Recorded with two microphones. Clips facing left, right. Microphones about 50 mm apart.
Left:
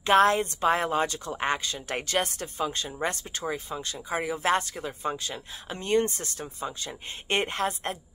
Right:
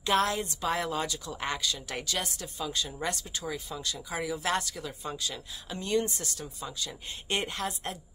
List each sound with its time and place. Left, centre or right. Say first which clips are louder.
0.0 s a woman's voice: left 7 dB; left